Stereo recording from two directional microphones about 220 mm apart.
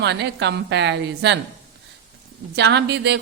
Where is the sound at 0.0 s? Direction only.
50° right (ahead or behind).